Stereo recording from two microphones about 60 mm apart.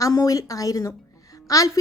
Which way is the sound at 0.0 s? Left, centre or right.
Left.